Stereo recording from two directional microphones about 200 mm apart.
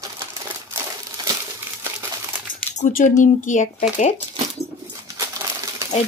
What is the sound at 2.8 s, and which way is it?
Speech, 40° left (ahead or behind).